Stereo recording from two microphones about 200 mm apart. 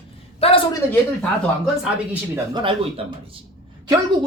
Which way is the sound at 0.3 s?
30° left (ahead or behind).